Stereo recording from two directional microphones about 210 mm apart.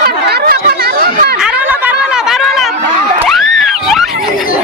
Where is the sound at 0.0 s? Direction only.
50° right (ahead or behind).